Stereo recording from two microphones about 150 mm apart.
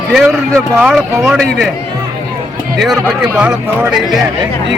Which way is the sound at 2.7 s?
Centre (ahead or behind).